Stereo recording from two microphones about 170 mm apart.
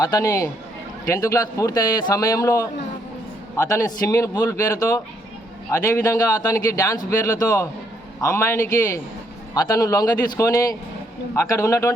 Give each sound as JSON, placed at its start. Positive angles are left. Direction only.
{"t": 0.0, "sound": "a man's voice", "side_deg": 20}